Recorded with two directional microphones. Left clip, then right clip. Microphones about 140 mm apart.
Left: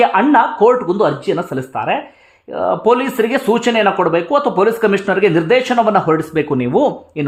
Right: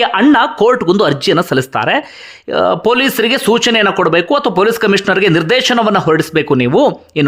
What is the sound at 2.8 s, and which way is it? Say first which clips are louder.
Speech: right 2 dB; 20° right (ahead or behind).